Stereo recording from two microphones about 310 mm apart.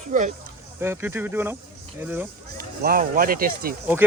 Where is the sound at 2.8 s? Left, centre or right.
Right.